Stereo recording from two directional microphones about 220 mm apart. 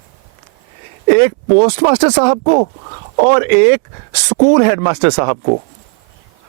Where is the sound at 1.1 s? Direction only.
15° right (ahead or behind).